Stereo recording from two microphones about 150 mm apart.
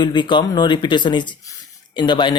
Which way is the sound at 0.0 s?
30° left (ahead or behind).